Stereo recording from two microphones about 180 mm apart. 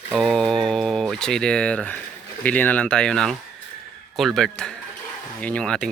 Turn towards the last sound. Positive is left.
turn(degrees=5)  # may be behind; listen again after turning